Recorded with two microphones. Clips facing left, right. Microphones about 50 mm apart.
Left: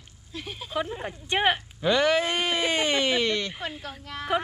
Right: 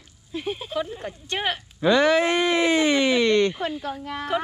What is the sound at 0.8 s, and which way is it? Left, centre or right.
Speech, left.